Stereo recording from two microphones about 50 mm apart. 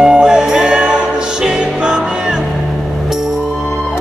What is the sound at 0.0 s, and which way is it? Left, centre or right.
Music, centre.